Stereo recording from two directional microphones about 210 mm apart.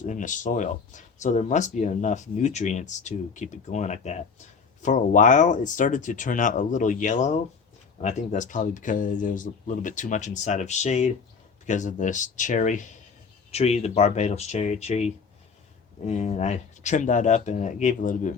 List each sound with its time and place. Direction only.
0.0 s speech: 35° left (ahead or behind)